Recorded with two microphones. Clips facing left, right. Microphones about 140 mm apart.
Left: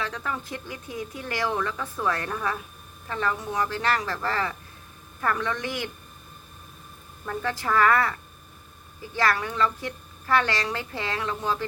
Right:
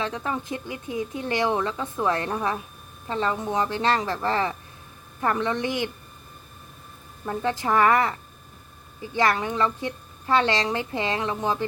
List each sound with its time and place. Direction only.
0.0 s a woman's voice: 20° right (ahead or behind)
7.3 s a woman's voice: 20° right (ahead or behind)